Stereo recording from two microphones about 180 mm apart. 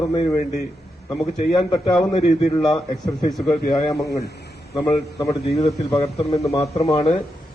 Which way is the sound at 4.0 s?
65° left (ahead or behind).